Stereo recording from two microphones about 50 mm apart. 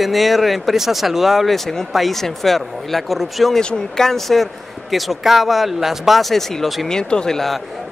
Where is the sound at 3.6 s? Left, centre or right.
Centre.